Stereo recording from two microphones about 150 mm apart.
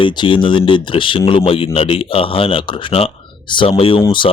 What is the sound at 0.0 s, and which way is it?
Speech, 35° left (ahead or behind).